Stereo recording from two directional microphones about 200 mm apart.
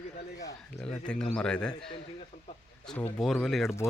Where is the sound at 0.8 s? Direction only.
5° left (ahead or behind).